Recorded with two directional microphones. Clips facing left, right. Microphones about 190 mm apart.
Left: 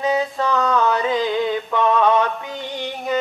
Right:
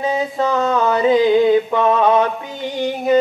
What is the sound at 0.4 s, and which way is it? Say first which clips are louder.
Music: right 2 dB; 25° right (ahead or behind).